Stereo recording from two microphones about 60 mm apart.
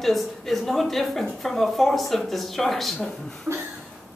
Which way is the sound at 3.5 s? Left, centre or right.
Centre.